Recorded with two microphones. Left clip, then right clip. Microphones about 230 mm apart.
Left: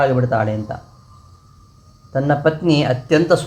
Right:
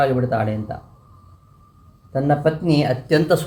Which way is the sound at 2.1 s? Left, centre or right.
Right.